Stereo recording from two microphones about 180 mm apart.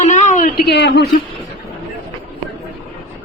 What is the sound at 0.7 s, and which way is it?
Speech, 70° left (ahead or behind).